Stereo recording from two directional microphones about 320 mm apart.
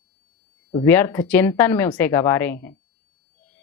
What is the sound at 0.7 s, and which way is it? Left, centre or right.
Speech, centre.